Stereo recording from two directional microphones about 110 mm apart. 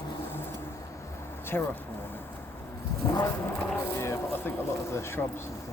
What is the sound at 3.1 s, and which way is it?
Speech, 20° left (ahead or behind).